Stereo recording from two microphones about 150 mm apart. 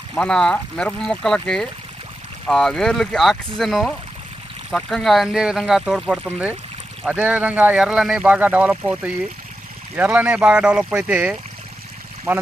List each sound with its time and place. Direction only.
0.1 s speech: 5° left (ahead or behind); by 12.4 s 15° right (ahead or behind)